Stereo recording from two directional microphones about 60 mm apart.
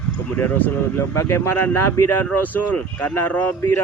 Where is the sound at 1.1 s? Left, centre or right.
Left.